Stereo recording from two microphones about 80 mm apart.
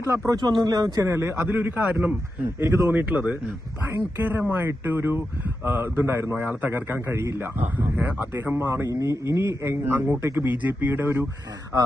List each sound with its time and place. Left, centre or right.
0.3 s speech: right
1.0 s a man's voice: right; by 2.1 s centre
2.6 s a man's voice: right
2.9 s speech: centre
6.7 s speech: right